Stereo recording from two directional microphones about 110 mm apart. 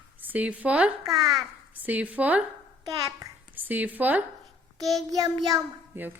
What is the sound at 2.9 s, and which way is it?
Speech, 35° right (ahead or behind).